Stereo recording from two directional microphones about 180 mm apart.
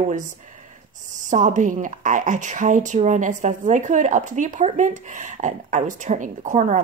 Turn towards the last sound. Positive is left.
turn(degrees=-40)  # may be behind; listen again after turning